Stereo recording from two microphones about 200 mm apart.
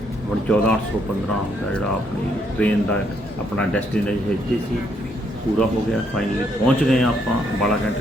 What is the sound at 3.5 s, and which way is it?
Speech, 5° left (ahead or behind).